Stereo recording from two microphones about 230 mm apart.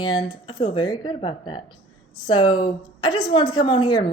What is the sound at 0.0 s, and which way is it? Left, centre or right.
Speech, centre.